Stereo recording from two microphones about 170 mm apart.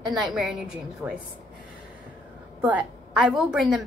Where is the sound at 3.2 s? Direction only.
5° right (ahead or behind).